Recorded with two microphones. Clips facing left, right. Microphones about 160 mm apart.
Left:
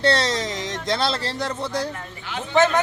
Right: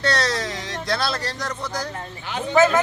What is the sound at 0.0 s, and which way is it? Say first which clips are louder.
Speech: left 2 dB; 25° left (ahead or behind).